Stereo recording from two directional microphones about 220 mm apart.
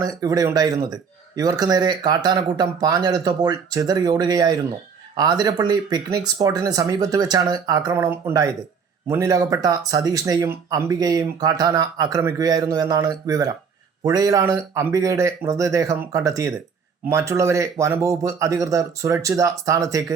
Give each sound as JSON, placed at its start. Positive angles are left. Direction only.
{"t": 0.0, "sound": "speech", "side_deg": -15}